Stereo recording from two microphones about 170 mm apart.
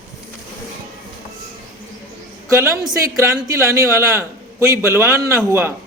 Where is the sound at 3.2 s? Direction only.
15° right (ahead or behind).